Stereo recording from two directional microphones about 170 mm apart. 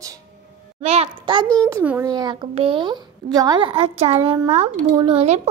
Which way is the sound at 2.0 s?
25° right (ahead or behind).